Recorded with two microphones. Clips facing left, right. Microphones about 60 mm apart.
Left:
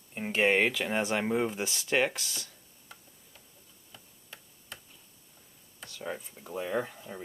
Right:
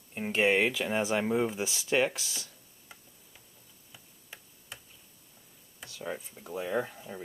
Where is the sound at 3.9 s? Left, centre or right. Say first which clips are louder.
Even; centre.